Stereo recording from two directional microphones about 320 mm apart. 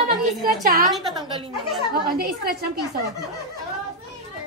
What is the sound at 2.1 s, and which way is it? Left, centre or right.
Speech, right.